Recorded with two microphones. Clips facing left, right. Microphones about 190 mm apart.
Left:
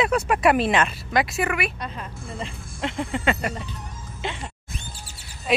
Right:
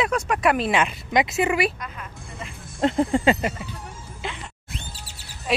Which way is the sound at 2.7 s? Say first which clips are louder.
Right 8 dB; 40° right (ahead or behind).